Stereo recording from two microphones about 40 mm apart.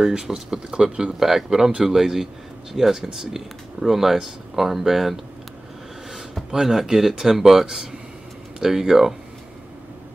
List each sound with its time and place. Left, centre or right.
0.0 s speech: centre
6.5 s speech: centre